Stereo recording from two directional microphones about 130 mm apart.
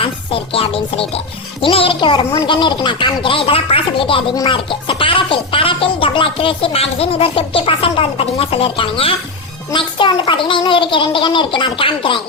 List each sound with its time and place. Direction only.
0.0 s a child's voice: 45° left (ahead or behind)